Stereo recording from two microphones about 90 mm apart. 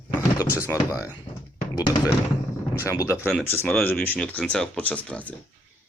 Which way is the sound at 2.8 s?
35° left (ahead or behind).